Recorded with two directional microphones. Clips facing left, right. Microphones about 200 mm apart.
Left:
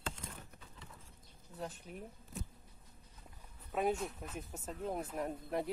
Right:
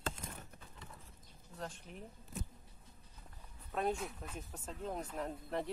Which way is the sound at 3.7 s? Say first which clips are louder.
Left 2 dB; 5° left (ahead or behind).